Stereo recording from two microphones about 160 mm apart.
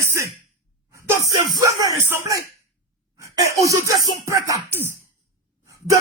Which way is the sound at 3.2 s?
20° right (ahead or behind).